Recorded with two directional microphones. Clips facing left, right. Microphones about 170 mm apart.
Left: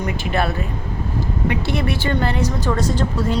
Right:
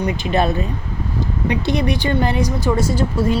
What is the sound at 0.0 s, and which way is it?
Speech, 20° right (ahead or behind).